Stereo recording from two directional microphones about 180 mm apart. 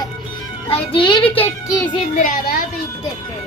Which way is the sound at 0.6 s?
30° left (ahead or behind).